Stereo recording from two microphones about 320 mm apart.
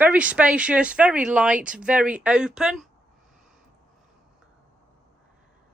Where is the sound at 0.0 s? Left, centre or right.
Centre.